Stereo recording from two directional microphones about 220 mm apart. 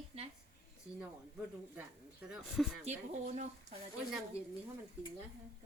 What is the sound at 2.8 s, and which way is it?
Speech, 30° right (ahead or behind).